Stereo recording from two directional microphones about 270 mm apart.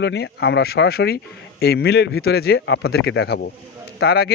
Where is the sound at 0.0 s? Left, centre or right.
Left.